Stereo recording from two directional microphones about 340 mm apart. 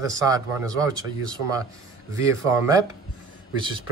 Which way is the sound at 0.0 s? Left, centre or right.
Centre.